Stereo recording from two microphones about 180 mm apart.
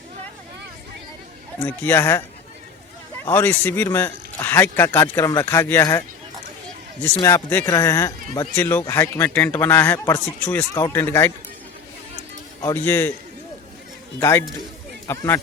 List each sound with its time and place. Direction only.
1.6 s speech: 10° left (ahead or behind)
3.2 s speech: 10° left (ahead or behind)
7.2 s speech: 15° left (ahead or behind)
12.6 s speech: 10° left (ahead or behind)
14.2 s speech: 15° left (ahead or behind)